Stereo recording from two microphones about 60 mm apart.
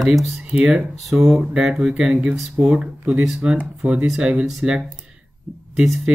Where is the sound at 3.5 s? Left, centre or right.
Right.